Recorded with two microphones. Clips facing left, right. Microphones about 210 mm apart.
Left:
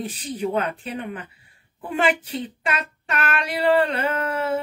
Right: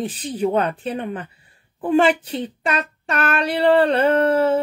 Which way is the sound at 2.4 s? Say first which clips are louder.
Right 4 dB; 40° right (ahead or behind).